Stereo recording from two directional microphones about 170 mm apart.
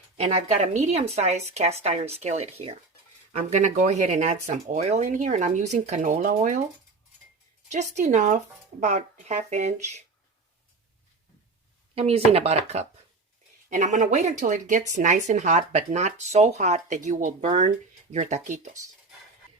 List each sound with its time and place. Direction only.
0.2 s speech: 45° right (ahead or behind)
7.7 s speech: 45° right (ahead or behind)
11.9 s speech: 35° right (ahead or behind)